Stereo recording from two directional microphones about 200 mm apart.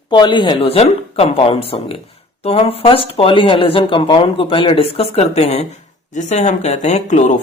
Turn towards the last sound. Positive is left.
turn(degrees=35)  # may be behind; listen again after turning